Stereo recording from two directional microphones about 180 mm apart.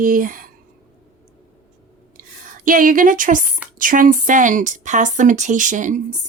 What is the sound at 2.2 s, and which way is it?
A woman's voice, 50° right (ahead or behind).